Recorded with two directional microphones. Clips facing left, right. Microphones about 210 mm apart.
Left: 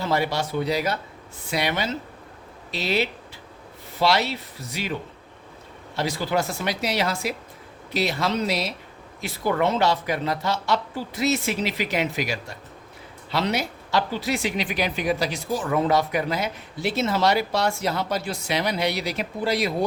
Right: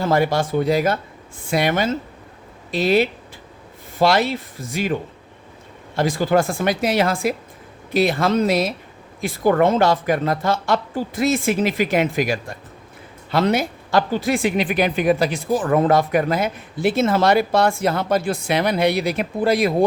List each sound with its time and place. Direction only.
0.0 s speech: 50° right (ahead or behind)
6.0 s speech: 50° right (ahead or behind)